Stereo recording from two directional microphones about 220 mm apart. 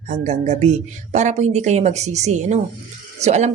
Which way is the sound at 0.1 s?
30° right (ahead or behind).